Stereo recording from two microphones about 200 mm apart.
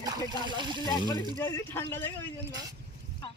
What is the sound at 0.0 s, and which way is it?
Speech, 20° right (ahead or behind).